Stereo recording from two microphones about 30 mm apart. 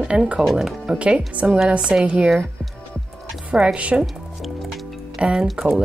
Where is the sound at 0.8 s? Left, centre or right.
Right.